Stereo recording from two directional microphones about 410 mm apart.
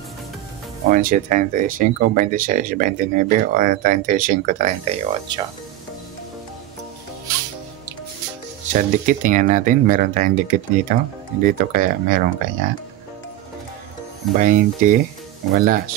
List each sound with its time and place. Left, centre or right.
0.9 s speech: centre
8.7 s speech: centre
14.3 s speech: centre